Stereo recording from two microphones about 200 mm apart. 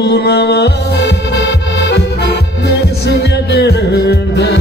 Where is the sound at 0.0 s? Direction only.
55° left (ahead or behind).